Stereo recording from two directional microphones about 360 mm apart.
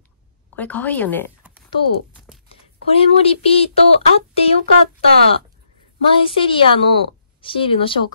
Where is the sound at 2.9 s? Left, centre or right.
Centre.